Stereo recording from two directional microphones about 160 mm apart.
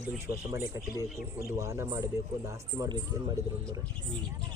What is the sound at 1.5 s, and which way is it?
Speech, 20° right (ahead or behind).